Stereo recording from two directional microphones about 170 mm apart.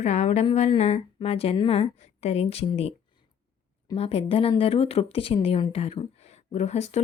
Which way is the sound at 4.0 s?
35° left (ahead or behind).